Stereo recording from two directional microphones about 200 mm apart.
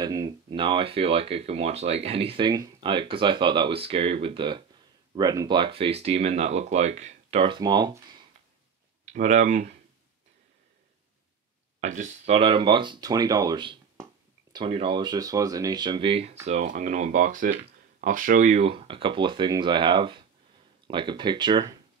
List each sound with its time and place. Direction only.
0.0 s speech: 20° right (ahead or behind)
9.0 s speech: 40° right (ahead or behind)
11.8 s speech: 35° right (ahead or behind)
12.4 s speech: 25° right (ahead or behind)